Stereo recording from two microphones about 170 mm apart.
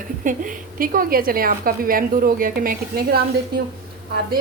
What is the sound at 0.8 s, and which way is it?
A woman's voice, 55° right (ahead or behind).